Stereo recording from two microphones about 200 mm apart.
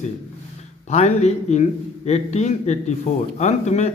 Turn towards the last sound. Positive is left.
turn(degrees=35)  # may be behind; listen again after turning